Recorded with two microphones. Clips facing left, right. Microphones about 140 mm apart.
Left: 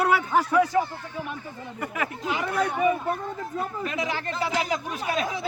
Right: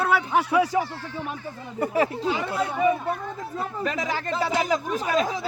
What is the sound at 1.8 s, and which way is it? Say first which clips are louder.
Speech: right 8 dB; 30° right (ahead or behind).